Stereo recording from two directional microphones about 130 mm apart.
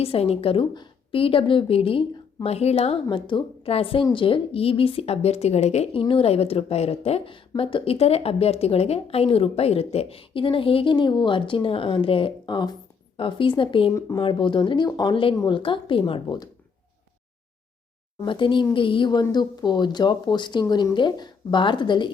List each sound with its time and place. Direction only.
0.0 s speech: 50° left (ahead or behind)
18.3 s speech: 40° left (ahead or behind)